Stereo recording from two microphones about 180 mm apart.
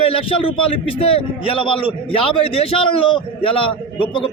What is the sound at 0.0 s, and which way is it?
A man's voice, 30° left (ahead or behind).